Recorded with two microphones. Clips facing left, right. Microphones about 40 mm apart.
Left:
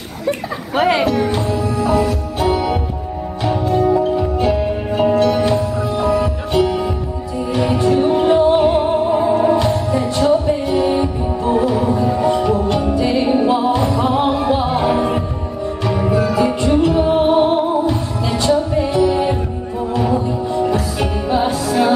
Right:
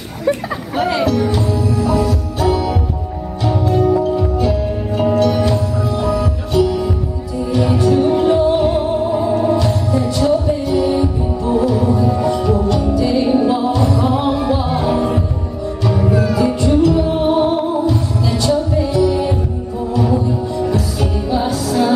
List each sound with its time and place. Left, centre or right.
0.7 s music: left
3.7 s music: centre
4.2 s music: left